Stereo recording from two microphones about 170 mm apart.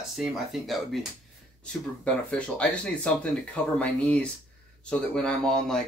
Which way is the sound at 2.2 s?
5° left (ahead or behind).